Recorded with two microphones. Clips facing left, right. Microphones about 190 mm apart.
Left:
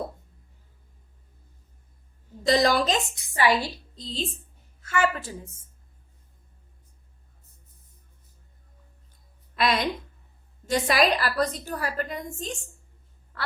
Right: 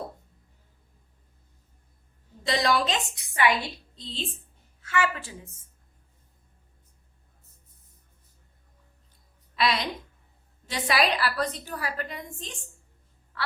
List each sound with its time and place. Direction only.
2.4 s a woman's voice: 40° left (ahead or behind)
9.6 s a woman's voice: 50° left (ahead or behind)
13.3 s quack: 45° left (ahead or behind)